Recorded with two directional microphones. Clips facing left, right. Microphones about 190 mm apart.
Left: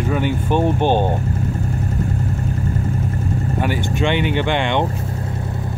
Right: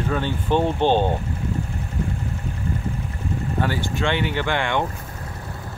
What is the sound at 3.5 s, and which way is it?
Speech, 15° left (ahead or behind).